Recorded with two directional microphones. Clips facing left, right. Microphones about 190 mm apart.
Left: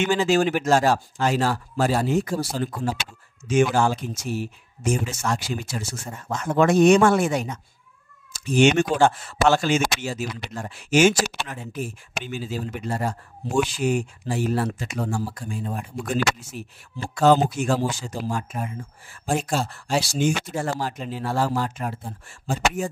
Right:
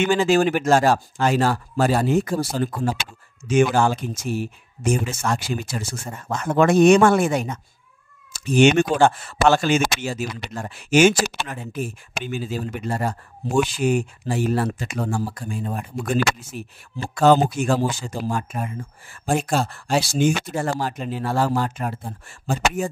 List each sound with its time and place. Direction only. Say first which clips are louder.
0.0 s speech: right 2 dB; 55° right (ahead or behind)